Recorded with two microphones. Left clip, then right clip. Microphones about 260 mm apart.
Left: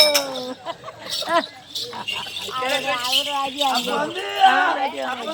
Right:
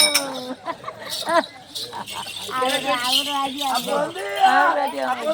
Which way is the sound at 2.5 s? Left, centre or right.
Left.